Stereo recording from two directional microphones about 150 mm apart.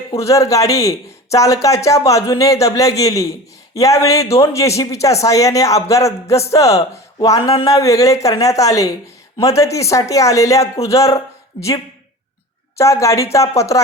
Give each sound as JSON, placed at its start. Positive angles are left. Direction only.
{"t": 0.2, "sound": "a man's voice", "side_deg": 20}
{"t": 12.7, "sound": "a man's voice", "side_deg": 20}